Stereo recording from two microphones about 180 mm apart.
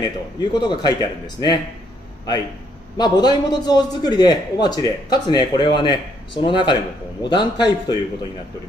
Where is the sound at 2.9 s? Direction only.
25° left (ahead or behind).